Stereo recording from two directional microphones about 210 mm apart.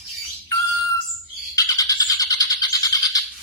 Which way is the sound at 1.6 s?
15° left (ahead or behind).